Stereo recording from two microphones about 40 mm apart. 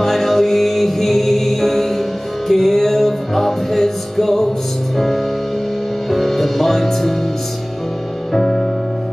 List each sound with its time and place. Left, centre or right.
0.0 s music: centre
8.3 s music: centre